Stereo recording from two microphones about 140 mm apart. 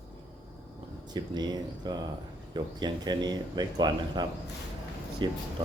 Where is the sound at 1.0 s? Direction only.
30° right (ahead or behind).